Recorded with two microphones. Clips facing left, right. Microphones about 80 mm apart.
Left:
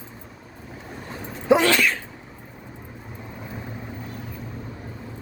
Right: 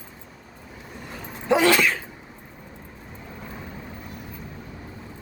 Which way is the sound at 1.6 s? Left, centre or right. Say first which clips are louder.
Right 1 dB; centre.